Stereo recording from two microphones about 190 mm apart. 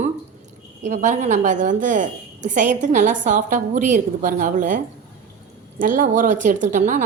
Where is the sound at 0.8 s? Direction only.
35° right (ahead or behind).